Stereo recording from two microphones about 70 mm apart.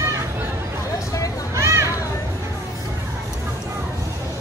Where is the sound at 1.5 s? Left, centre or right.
Right.